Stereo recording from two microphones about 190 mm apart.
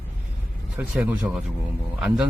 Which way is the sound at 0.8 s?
5° right (ahead or behind).